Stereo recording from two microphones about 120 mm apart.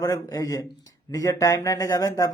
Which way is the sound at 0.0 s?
30° left (ahead or behind).